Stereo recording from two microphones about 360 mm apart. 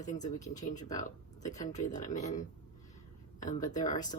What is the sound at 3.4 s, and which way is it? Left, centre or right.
Speech, left.